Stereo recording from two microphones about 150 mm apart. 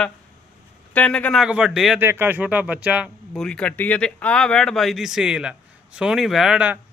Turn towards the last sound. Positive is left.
turn(degrees=-5)  # may be behind; listen again after turning